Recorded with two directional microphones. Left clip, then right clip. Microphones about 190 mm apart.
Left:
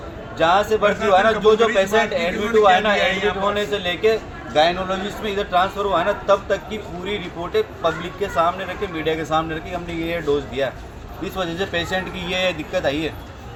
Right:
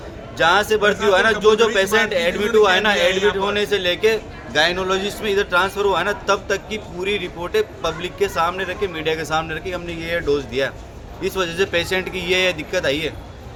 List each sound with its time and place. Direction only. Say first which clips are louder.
0.3 s a man's voice: right 1 dB; 20° right (ahead or behind)
11.2 s speech: right 4 dB; 20° right (ahead or behind)